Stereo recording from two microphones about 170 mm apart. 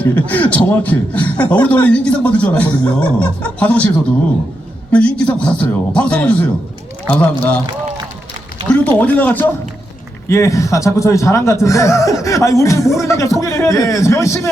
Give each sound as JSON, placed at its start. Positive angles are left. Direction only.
{"t": 0.0, "sound": "a man's voice", "side_deg": 10}
{"t": 4.9, "sound": "a man's voice", "side_deg": 5}
{"t": 8.6, "sound": "a man's voice", "side_deg": 10}